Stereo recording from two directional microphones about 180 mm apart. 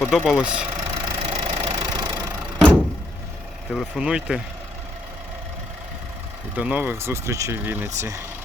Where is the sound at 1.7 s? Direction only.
20° right (ahead or behind).